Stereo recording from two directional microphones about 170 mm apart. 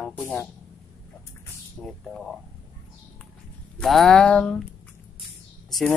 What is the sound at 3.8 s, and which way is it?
Speech, centre (ahead or behind).